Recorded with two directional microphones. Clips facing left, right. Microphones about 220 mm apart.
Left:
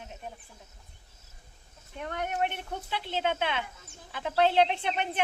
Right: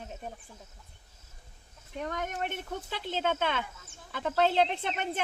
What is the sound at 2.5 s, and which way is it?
Speech, 45° right (ahead or behind).